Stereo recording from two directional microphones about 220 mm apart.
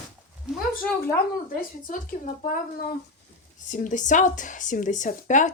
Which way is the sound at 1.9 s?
35° left (ahead or behind).